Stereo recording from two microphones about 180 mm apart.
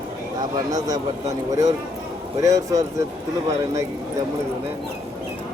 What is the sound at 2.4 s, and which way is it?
Speech, 20° right (ahead or behind).